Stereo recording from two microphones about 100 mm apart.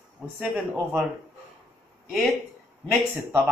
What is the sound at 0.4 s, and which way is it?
Speech, 10° right (ahead or behind).